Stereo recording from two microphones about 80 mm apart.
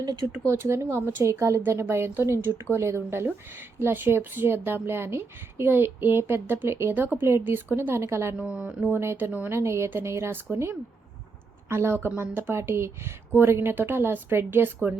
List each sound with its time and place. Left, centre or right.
0.0 s speech: right
0.4 s a woman's voice: right
8.4 s speech: centre
8.9 s a woman's voice: right